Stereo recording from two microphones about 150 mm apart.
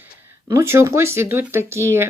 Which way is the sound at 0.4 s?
20° right (ahead or behind).